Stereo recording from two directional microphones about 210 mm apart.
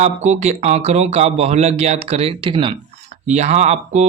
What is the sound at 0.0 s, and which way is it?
Speech, 35° right (ahead or behind).